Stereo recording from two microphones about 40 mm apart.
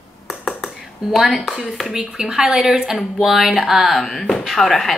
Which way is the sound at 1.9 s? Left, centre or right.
Centre.